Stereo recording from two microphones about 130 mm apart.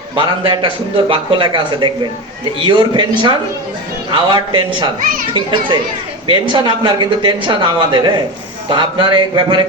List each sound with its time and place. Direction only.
0.2 s speech: 35° right (ahead or behind)